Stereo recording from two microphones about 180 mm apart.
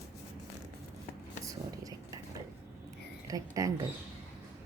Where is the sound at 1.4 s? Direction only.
20° right (ahead or behind).